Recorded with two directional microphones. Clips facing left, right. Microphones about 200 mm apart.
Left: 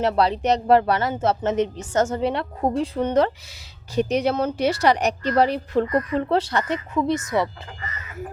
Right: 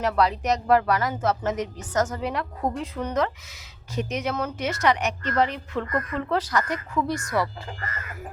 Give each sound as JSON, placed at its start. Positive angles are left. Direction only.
{"t": 0.0, "sound": "a woman's voice", "side_deg": 30}